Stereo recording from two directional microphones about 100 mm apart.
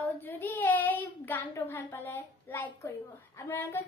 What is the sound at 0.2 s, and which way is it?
Child singing, 20° left (ahead or behind).